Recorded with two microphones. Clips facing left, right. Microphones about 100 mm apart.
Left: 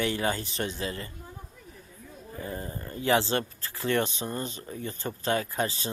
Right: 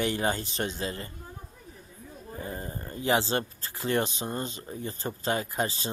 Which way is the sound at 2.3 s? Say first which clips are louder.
Left 1 dB; 30° right (ahead or behind).